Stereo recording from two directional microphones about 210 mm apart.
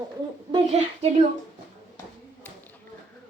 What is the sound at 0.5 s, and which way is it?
Speech, 30° right (ahead or behind).